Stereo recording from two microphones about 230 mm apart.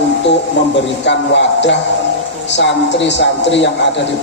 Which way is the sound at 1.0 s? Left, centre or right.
Left.